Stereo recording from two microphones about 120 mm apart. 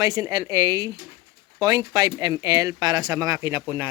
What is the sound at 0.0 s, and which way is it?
Speech, 30° right (ahead or behind).